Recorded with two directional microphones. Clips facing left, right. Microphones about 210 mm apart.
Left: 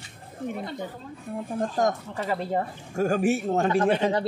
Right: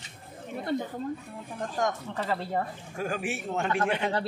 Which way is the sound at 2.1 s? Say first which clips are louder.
Left 3 dB; 15° left (ahead or behind).